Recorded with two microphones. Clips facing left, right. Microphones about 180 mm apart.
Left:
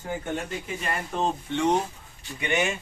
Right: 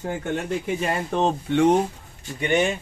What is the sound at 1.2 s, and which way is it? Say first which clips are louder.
Speech: right 7 dB; 60° right (ahead or behind).